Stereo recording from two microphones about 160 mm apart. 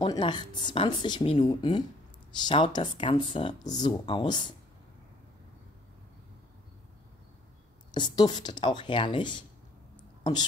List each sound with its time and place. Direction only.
0.0 s speech: 30° left (ahead or behind)
7.9 s speech: 25° left (ahead or behind)